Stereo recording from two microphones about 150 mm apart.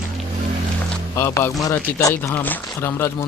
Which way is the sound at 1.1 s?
20° left (ahead or behind).